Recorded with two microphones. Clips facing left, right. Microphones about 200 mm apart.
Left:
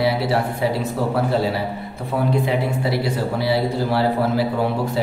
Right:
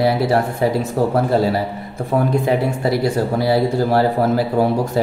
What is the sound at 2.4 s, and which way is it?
Speech, 45° right (ahead or behind).